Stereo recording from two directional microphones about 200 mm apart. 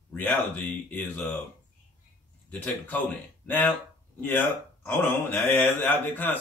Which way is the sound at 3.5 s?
10° left (ahead or behind).